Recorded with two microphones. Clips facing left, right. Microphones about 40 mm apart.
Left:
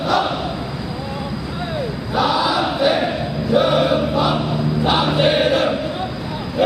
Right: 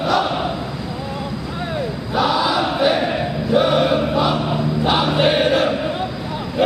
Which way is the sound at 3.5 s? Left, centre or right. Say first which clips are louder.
Even; centre.